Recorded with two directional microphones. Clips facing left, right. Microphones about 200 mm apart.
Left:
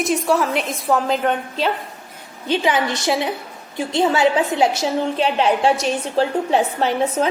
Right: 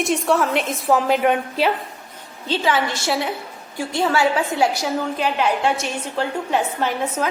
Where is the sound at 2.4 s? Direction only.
15° left (ahead or behind).